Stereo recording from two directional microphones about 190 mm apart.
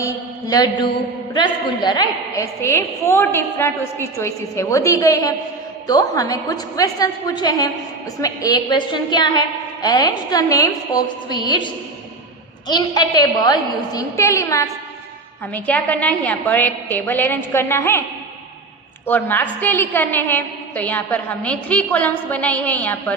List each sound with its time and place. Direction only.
0.0 s a woman's voice: 20° left (ahead or behind)
12.6 s a woman's voice: 20° left (ahead or behind)
19.0 s a woman's voice: 10° left (ahead or behind)